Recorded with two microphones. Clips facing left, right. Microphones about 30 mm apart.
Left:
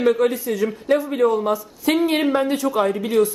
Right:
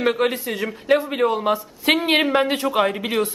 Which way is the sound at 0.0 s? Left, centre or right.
Right.